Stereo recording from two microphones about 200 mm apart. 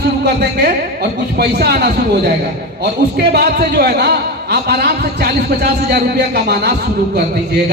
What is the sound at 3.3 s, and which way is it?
A man's voice, 50° right (ahead or behind).